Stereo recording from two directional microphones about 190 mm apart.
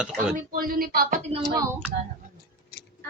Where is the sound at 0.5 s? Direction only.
50° right (ahead or behind); by 1.4 s 35° right (ahead or behind).